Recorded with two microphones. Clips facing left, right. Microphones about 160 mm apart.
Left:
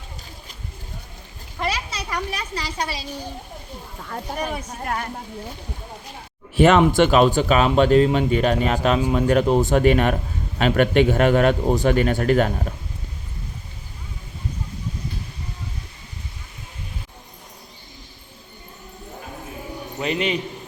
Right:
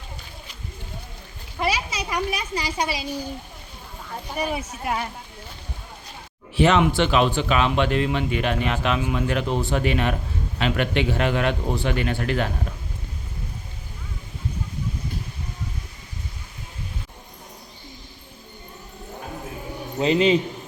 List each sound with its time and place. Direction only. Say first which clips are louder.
1.5 s speech: right 2 dB; 10° right (ahead or behind)
4.4 s speech: right 3 dB; 5° right (ahead or behind)
6.6 s a man's voice: left 4 dB; 50° left (ahead or behind)
20.0 s a man's voice: right 5 dB; 25° right (ahead or behind)